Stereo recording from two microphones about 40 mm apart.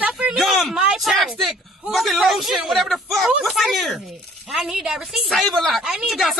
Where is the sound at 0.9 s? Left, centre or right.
Centre.